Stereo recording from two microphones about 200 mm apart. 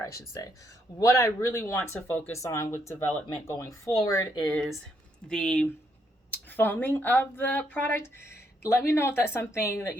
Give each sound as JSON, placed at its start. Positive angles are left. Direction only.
{"t": 0.0, "sound": "speech", "side_deg": 15}
{"t": 4.5, "sound": "a woman's voice", "side_deg": 0}